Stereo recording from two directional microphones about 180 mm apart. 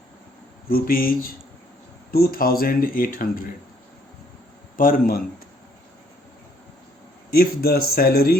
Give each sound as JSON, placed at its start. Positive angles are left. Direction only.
{"t": 0.7, "sound": "speech", "side_deg": 55}
{"t": 4.8, "sound": "speech", "side_deg": 50}
{"t": 7.3, "sound": "speech", "side_deg": 60}